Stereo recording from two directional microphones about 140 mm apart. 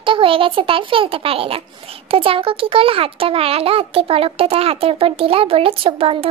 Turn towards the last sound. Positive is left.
turn(degrees=-40)  # may be behind; listen again after turning